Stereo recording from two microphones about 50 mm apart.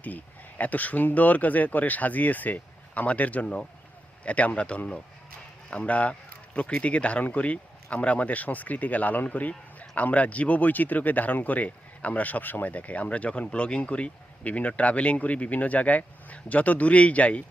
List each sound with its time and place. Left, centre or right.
0.6 s speech: left